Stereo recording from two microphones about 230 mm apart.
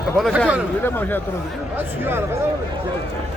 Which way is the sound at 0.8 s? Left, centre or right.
Centre.